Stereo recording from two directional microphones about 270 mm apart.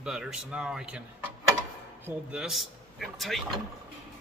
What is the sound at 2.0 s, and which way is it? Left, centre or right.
Speech, centre.